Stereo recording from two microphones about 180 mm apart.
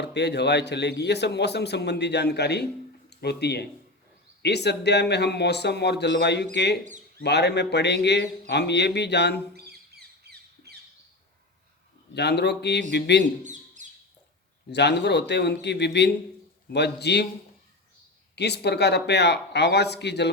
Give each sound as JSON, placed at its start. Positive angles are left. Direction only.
{"t": 0.0, "sound": "a man's voice", "side_deg": 70}
{"t": 9.6, "sound": "bird", "side_deg": -65}
{"t": 12.1, "sound": "a man's voice", "side_deg": 70}
{"t": 13.4, "sound": "bird", "side_deg": -45}
{"t": 14.7, "sound": "a man's voice", "side_deg": 70}
{"t": 18.3, "sound": "a man's voice", "side_deg": 65}